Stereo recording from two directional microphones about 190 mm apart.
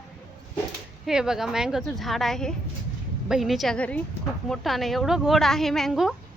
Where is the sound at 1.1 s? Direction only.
5° right (ahead or behind).